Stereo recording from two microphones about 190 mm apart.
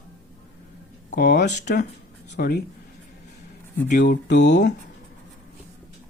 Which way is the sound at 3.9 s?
50° left (ahead or behind).